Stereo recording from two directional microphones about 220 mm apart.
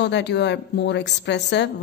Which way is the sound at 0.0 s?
50° left (ahead or behind).